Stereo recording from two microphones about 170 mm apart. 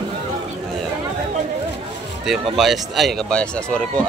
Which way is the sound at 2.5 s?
Centre (ahead or behind).